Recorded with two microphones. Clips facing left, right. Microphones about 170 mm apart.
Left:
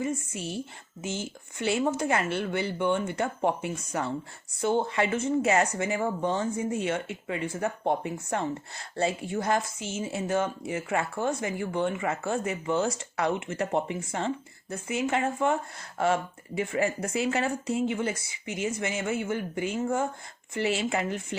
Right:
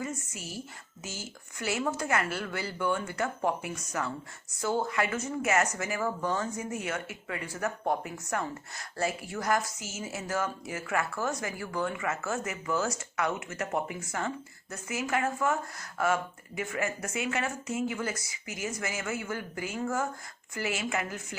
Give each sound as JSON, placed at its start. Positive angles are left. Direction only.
{"t": 0.0, "sound": "speech", "side_deg": 30}